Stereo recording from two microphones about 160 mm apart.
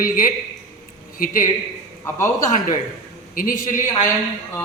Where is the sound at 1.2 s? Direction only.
60° left (ahead or behind).